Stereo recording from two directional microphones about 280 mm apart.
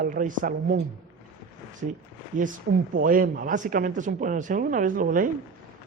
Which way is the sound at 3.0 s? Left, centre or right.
Right.